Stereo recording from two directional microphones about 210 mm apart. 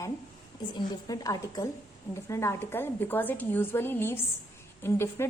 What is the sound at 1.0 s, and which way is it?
A woman's voice, 15° left (ahead or behind).